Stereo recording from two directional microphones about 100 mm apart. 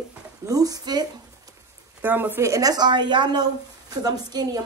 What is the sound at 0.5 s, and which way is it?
Speech, 35° right (ahead or behind).